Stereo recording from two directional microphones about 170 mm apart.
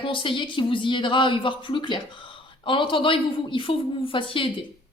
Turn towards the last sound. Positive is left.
turn(degrees=30)  # may be behind; listen again after turning